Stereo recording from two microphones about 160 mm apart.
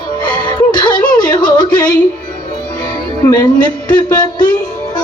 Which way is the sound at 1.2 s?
25° left (ahead or behind).